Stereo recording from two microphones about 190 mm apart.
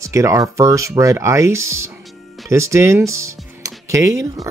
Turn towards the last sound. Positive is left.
turn(degrees=-15)  # may be behind; listen again after turning